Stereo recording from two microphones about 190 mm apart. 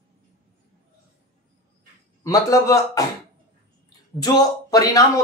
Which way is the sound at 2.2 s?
15° left (ahead or behind).